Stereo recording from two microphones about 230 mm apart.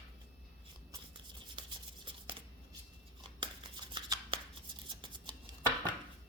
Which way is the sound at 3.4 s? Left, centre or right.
Right.